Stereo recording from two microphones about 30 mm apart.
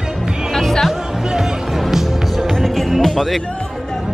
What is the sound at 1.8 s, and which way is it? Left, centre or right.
Music, centre.